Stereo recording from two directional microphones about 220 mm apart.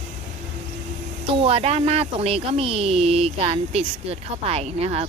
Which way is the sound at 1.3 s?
25° right (ahead or behind).